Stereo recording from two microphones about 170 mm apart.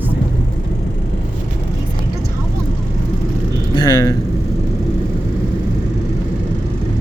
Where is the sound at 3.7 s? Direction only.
25° left (ahead or behind).